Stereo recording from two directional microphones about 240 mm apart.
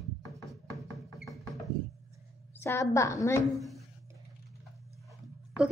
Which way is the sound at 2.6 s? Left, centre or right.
Centre.